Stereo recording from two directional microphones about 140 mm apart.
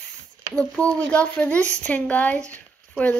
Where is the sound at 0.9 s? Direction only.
10° left (ahead or behind).